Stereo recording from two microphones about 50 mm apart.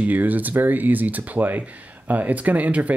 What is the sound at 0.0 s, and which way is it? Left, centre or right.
Speech, right.